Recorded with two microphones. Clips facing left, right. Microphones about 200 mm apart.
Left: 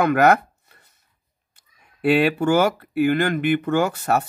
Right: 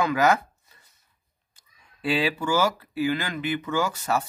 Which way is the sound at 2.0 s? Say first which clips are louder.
Left 7 dB; 60° left (ahead or behind).